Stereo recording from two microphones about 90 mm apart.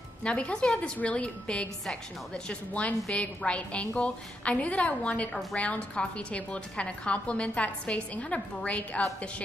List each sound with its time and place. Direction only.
0.2 s a woman's voice: 10° left (ahead or behind)